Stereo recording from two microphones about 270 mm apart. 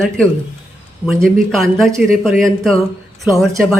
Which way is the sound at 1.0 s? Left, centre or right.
Centre.